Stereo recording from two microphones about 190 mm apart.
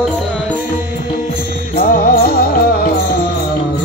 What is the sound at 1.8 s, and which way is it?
Music, 55° left (ahead or behind).